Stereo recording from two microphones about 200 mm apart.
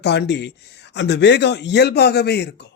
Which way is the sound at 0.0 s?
55° left (ahead or behind).